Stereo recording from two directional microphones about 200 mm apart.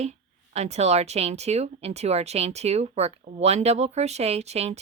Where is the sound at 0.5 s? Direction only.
35° right (ahead or behind).